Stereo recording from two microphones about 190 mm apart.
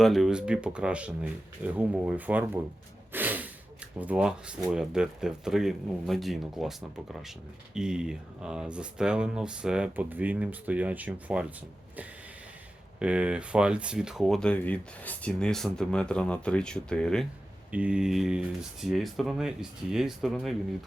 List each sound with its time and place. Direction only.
0.0 s speech: centre (ahead or behind)
3.1 s snort: 10° right (ahead or behind)
4.0 s speech: 5° right (ahead or behind)
13.0 s speech: 5° right (ahead or behind)
17.7 s speech: 5° right (ahead or behind)